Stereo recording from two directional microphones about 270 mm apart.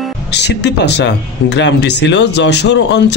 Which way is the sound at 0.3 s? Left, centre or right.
Left.